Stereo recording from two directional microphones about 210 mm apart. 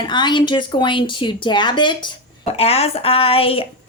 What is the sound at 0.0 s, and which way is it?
A woman's voice, 20° left (ahead or behind).